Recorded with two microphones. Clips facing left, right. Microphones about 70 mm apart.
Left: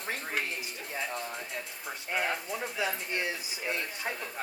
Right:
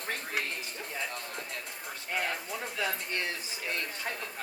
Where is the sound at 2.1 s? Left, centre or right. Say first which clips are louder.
Left 2 dB; centre.